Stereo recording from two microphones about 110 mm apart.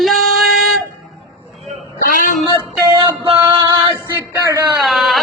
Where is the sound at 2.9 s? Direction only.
45° right (ahead or behind).